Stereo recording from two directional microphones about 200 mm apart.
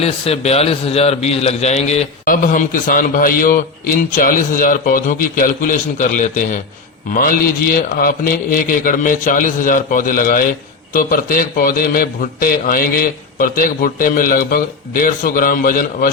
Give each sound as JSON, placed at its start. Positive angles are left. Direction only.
{"t": 0.0, "sound": "a man's voice", "side_deg": 30}